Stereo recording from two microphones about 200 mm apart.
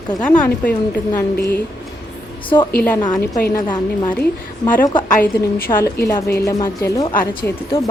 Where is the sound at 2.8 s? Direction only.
15° left (ahead or behind).